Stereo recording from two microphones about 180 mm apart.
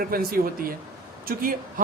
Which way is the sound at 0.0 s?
55° right (ahead or behind).